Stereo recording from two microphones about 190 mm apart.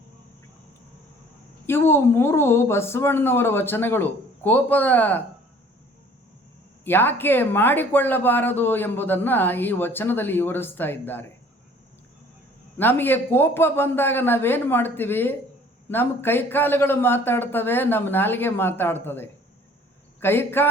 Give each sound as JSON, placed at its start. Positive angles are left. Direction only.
{"t": 1.6, "sound": "speech", "side_deg": 10}
{"t": 6.8, "sound": "speech", "side_deg": 10}
{"t": 12.7, "sound": "speech", "side_deg": 10}